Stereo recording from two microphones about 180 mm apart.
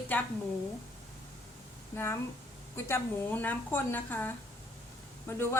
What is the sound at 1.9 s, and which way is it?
Speech, 15° left (ahead or behind).